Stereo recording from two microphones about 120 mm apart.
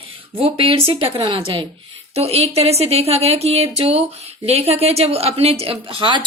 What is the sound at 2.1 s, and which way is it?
A woman's voice, 55° right (ahead or behind).